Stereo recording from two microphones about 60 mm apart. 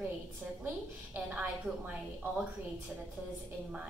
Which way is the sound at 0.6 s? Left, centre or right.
Right.